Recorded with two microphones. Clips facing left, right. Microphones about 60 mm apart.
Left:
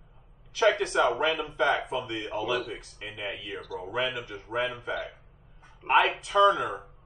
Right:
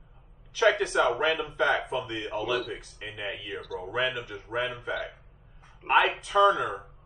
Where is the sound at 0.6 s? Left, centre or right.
Right.